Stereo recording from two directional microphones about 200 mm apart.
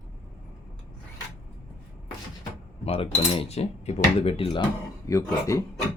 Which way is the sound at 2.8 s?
30° left (ahead or behind).